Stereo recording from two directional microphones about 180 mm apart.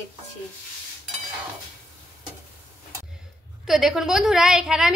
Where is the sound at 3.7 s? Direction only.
Centre (ahead or behind).